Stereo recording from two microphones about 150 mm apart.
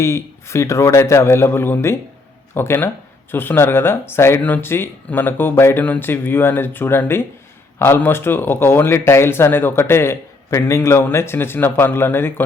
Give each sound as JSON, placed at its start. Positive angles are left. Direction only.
{"t": 0.0, "sound": "a man's voice", "side_deg": 20}